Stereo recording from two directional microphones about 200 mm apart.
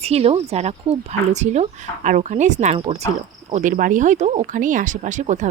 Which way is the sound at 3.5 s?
40° right (ahead or behind).